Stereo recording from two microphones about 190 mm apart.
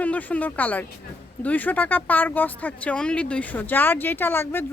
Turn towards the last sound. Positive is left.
turn(degrees=10)  # may be behind; listen again after turning